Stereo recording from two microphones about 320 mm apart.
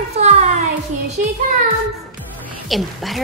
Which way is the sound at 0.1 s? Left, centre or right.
Centre.